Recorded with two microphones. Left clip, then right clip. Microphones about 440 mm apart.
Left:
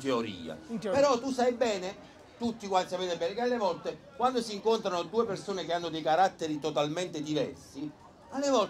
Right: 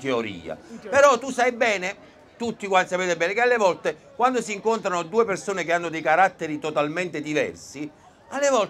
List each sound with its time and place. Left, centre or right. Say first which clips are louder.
0.0 s speech: right 6 dB; right
2.4 s a man's voice: right 8 dB; right
4.2 s speech: right 7 dB; right
8.4 s a man's voice: right 7 dB; right